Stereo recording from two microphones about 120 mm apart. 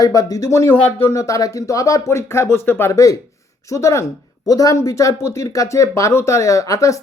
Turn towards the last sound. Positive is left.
turn(degrees=25)  # may be behind; listen again after turning